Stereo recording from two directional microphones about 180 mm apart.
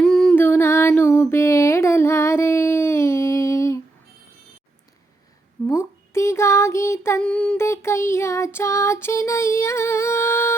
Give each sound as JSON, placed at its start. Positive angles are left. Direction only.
{"t": 0.0, "sound": "music", "side_deg": 5}
{"t": 5.6, "sound": "child singing", "side_deg": 15}